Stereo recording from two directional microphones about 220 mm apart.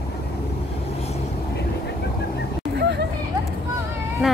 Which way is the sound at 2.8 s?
50° right (ahead or behind).